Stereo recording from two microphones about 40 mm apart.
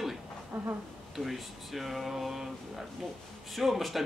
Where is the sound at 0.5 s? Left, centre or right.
Right.